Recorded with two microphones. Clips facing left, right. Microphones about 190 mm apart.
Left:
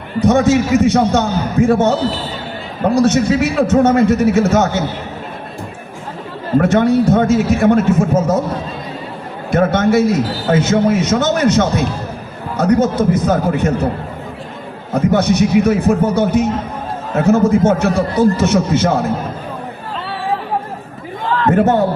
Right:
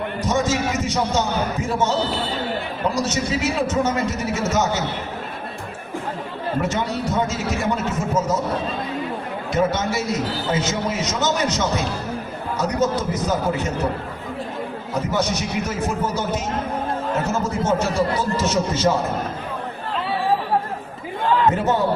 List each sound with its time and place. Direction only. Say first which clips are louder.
0.2 s a man's voice: left 11 dB; 60° left (ahead or behind)
6.6 s a man's voice: left 13 dB; 55° left (ahead or behind)
9.5 s a man's voice: left 8 dB; 55° left (ahead or behind)
14.9 s a man's voice: left 10 dB; 60° left (ahead or behind)
21.2 s a sound: left 1 dB; 15° right (ahead or behind)
21.5 s a man's voice: left 8 dB; 55° left (ahead or behind)